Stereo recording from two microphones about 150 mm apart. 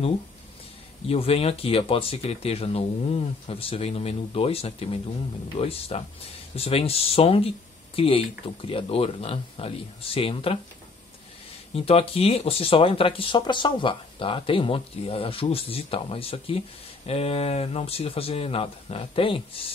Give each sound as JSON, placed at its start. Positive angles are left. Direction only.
{"t": 1.0, "sound": "speech", "side_deg": 40}
{"t": 11.7, "sound": "speech", "side_deg": 40}